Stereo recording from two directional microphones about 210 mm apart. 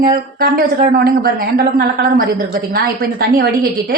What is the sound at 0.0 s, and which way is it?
Speech, 45° right (ahead or behind).